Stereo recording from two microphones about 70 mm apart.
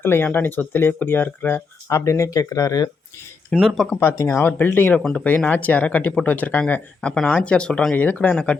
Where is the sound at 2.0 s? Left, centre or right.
Left.